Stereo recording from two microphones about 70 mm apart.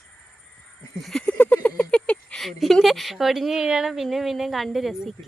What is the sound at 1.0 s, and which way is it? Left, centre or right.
Speech, centre.